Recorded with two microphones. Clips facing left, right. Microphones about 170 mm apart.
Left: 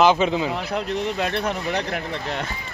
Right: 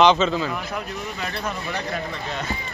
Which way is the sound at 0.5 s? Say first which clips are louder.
Left 5 dB; 75° left (ahead or behind).